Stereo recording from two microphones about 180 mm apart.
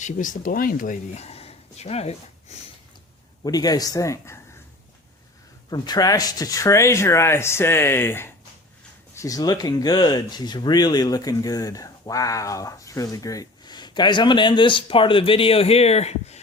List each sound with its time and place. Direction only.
0.0 s speech: 45° left (ahead or behind)
3.4 s speech: 20° left (ahead or behind)
5.7 s speech: 20° left (ahead or behind)